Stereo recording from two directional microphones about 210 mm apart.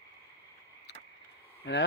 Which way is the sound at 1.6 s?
55° left (ahead or behind).